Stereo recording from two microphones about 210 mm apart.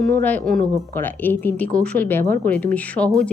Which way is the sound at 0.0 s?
10° left (ahead or behind).